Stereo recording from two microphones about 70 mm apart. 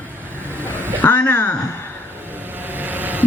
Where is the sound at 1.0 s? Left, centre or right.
Left.